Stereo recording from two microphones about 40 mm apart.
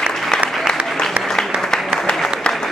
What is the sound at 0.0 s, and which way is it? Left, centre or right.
Applause, centre.